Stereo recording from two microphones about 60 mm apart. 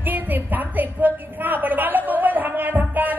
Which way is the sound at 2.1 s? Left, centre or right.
Right.